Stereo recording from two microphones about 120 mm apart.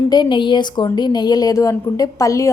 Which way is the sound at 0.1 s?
40° left (ahead or behind).